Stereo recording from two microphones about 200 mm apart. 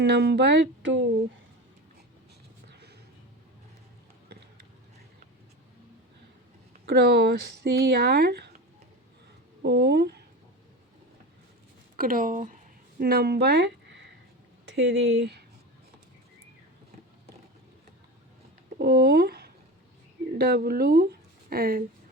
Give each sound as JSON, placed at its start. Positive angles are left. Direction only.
{"t": 0.0, "sound": "speech", "side_deg": -55}
{"t": 6.8, "sound": "speech", "side_deg": -55}
{"t": 9.6, "sound": "speech", "side_deg": -55}
{"t": 11.9, "sound": "a woman's voice", "side_deg": -45}
{"t": 18.8, "sound": "speech", "side_deg": -50}